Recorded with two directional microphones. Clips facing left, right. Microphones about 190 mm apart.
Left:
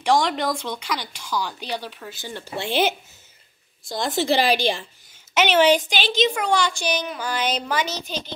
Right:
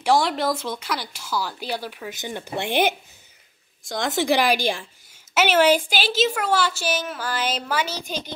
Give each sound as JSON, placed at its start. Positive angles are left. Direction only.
{"t": 0.0, "sound": "a woman's voice", "side_deg": -5}
{"t": 2.6, "sound": "a woman's voice", "side_deg": -55}
{"t": 4.1, "sound": "a woman's voice", "side_deg": -15}